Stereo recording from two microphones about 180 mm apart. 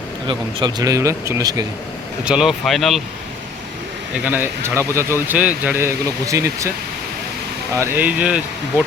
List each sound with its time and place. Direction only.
0.3 s speech: 20° right (ahead or behind)
2.2 s speech: 5° right (ahead or behind)
4.1 s speech: 10° right (ahead or behind)
7.7 s speech: 15° right (ahead or behind)